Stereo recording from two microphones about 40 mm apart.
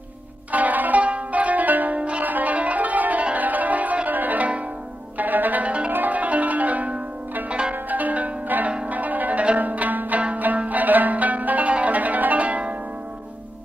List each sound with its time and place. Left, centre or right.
0.5 s zither: right
1.0 s music: right
2.2 s music: right
5.1 s zither: right
5.9 s zither: right